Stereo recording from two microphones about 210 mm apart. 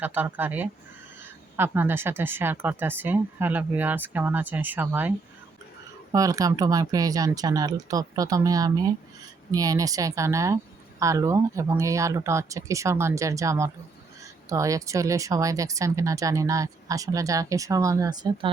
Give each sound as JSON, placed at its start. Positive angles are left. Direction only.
{"t": 0.0, "sound": "speech", "side_deg": -10}